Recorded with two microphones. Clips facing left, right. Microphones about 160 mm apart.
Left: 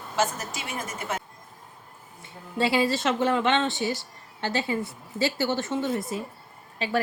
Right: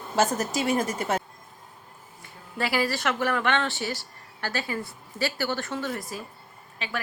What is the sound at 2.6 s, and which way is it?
Speech, 25° left (ahead or behind).